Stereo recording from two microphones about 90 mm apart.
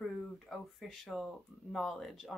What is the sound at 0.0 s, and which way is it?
Speech, centre (ahead or behind).